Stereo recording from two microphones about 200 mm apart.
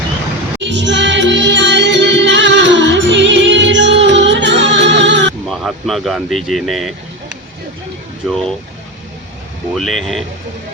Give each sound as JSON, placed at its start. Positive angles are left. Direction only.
{"t": 0.6, "sound": "music", "side_deg": -60}
{"t": 5.5, "sound": "speech", "side_deg": 0}
{"t": 8.3, "sound": "speech", "side_deg": 0}
{"t": 9.7, "sound": "speech", "side_deg": 0}